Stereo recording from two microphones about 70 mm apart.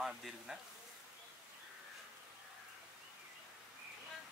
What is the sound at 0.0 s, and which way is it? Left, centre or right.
Speech, centre.